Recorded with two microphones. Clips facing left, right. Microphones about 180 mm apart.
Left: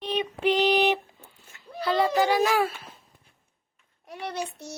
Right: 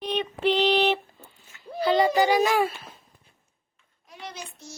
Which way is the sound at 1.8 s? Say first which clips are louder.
Right 2 dB; centre (ahead or behind).